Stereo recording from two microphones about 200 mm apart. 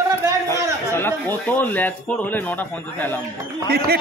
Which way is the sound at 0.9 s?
10° left (ahead or behind).